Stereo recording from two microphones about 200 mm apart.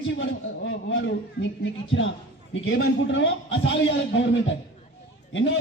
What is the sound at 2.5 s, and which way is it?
A man's voice, 65° left (ahead or behind).